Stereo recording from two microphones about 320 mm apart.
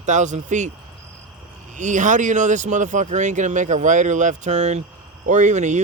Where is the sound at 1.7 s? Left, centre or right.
Right.